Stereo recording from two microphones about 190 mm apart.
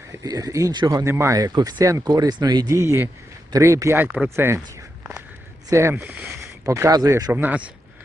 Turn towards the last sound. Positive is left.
turn(degrees=-10)  # may be behind; listen again after turning